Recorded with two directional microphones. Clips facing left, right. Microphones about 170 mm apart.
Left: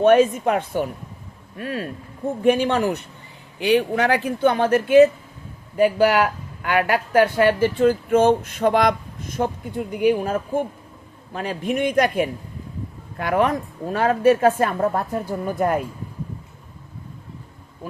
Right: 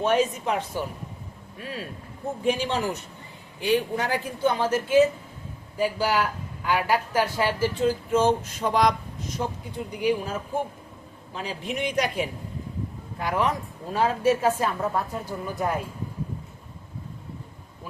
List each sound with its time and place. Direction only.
0.0 s a woman's voice: 55° left (ahead or behind)
3.6 s a woman's voice: 75° left (ahead or behind); by 15.8 s 55° left (ahead or behind)